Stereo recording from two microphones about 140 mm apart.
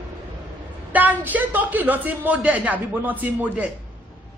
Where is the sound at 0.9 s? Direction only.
10° right (ahead or behind).